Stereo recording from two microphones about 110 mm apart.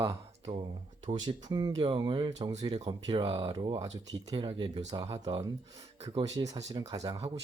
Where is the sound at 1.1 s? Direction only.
40° right (ahead or behind).